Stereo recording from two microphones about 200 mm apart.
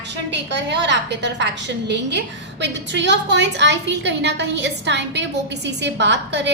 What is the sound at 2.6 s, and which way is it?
A woman's voice, 60° right (ahead or behind).